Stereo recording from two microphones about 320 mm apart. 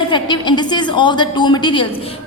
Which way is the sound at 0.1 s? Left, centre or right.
Centre.